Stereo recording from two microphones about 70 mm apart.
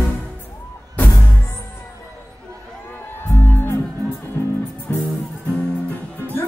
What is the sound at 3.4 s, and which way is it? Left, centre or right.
Music, left.